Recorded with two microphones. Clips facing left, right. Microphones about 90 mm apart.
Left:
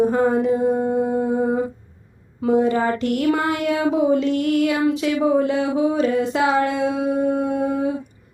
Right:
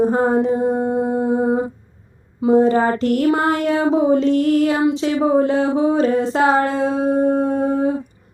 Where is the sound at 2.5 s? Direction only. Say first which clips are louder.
Right 4 dB; 35° right (ahead or behind).